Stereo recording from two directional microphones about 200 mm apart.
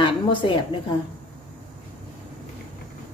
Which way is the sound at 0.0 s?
25° left (ahead or behind).